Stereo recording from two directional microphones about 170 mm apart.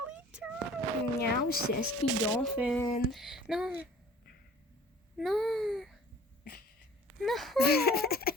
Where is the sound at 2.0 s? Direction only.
5° right (ahead or behind).